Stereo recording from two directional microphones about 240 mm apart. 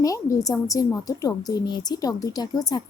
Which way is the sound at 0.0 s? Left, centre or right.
Centre.